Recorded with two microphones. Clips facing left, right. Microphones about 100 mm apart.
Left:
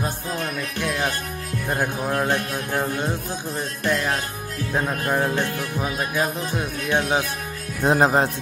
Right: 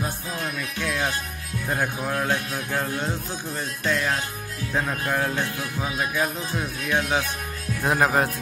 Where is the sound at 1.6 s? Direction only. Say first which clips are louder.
Left 2 dB; 15° left (ahead or behind).